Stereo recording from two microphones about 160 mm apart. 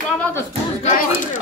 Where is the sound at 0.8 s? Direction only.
55° left (ahead or behind).